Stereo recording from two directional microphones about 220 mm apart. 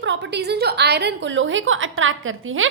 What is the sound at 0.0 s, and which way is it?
A woman's voice, 55° right (ahead or behind).